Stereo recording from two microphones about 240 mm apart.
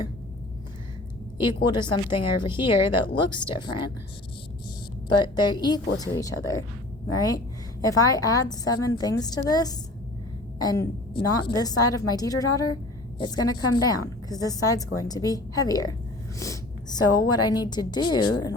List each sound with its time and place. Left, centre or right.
1.4 s speech: centre
5.1 s a woman's voice: centre
7.8 s a woman's voice: centre